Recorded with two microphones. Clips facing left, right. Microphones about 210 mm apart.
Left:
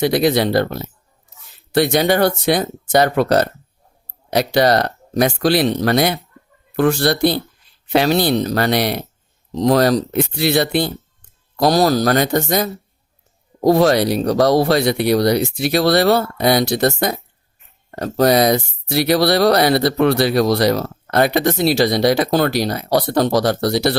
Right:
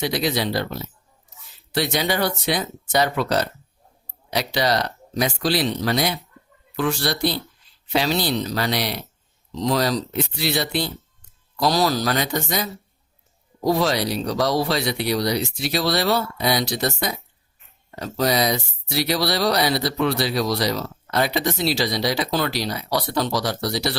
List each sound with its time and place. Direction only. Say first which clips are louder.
0.0 s speech: left 8 dB; 55° left (ahead or behind)